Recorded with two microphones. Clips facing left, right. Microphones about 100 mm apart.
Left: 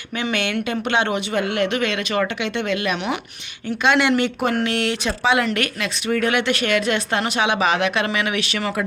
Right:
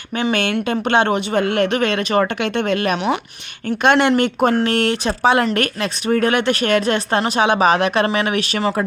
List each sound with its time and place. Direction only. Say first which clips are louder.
0.2 s speech: right 4 dB; 40° right (ahead or behind)